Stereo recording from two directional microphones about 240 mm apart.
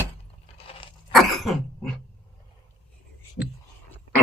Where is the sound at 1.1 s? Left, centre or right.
Centre.